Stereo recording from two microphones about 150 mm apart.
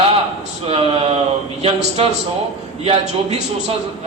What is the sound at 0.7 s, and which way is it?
Speech, 45° right (ahead or behind).